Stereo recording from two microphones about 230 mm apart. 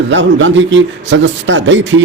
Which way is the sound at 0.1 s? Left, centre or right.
Right.